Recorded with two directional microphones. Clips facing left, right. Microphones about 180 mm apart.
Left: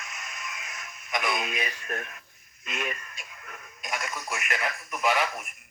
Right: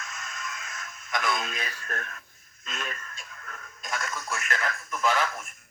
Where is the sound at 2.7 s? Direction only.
15° left (ahead or behind).